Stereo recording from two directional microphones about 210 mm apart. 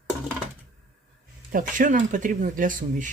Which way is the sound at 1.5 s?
40° right (ahead or behind).